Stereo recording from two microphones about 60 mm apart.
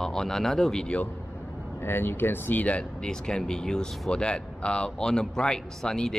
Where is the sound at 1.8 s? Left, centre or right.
Left.